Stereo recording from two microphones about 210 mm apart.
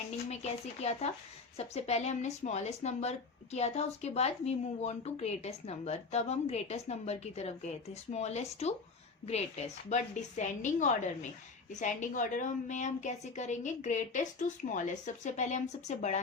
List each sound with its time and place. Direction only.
0.3 s speech: 30° left (ahead or behind)